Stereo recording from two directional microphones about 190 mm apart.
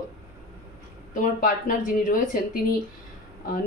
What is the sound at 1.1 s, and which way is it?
A woman's voice, 45° left (ahead or behind).